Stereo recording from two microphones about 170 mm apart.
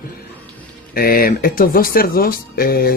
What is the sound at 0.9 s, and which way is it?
Speech, 60° left (ahead or behind).